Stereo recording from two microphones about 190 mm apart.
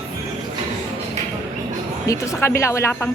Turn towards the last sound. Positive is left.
turn(degrees=15)  # may be behind; listen again after turning